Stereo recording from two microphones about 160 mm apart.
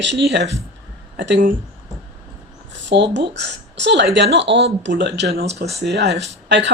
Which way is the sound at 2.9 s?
90° right.